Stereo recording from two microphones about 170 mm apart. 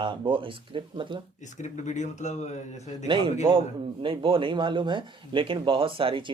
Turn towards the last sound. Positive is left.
turn(degrees=-30)  # may be behind; listen again after turning